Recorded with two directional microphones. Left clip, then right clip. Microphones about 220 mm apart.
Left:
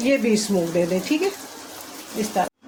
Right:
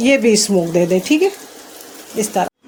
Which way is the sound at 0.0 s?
40° right (ahead or behind).